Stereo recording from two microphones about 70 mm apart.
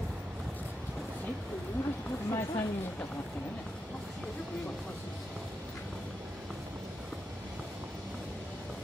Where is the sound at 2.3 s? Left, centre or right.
Left.